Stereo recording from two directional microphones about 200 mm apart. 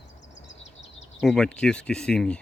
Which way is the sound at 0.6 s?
65° left (ahead or behind).